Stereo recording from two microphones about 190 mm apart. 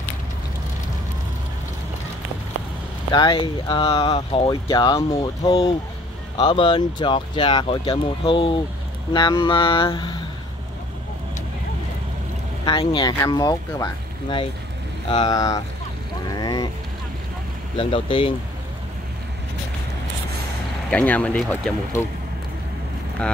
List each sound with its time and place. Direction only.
3.1 s speech: 25° left (ahead or behind)
12.6 s speech: 25° left (ahead or behind)
15.0 s speech: 20° left (ahead or behind)
16.3 s vehicle: 20° left (ahead or behind)
17.7 s speech: 25° left (ahead or behind)
20.9 s speech: 10° left (ahead or behind)